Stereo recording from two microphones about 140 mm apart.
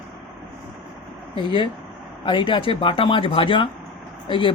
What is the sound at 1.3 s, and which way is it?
Speech, 35° left (ahead or behind).